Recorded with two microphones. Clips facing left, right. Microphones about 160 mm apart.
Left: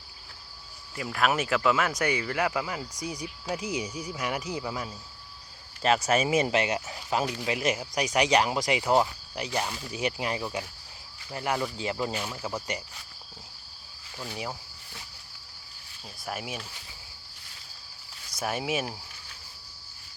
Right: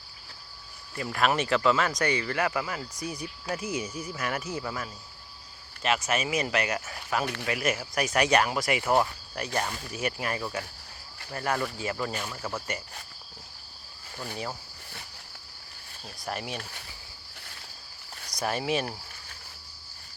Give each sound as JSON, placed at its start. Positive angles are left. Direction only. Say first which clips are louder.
{"t": 0.9, "sound": "speech", "louder": "right 1 dB", "side_deg": 5}
{"t": 5.8, "sound": "speech", "louder": "left 4 dB", "side_deg": 35}
{"t": 16.2, "sound": "speech", "louder": "right 1 dB", "side_deg": 5}
{"t": 18.3, "sound": "speech", "louder": "right 1 dB", "side_deg": 5}